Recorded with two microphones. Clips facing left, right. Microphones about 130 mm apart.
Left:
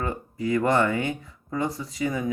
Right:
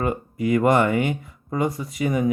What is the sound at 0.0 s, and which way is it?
Speech, 20° right (ahead or behind).